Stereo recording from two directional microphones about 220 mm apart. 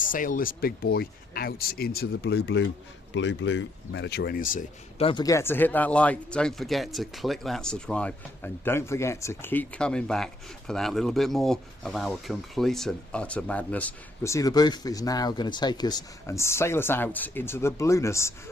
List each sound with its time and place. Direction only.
0.0 s speech: 35° left (ahead or behind)
4.9 s speech: 20° left (ahead or behind)